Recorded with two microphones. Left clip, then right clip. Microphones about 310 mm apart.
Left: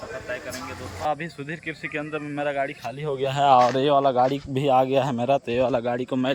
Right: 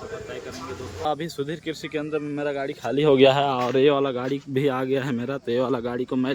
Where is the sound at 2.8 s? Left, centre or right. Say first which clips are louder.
Right 10 dB; centre.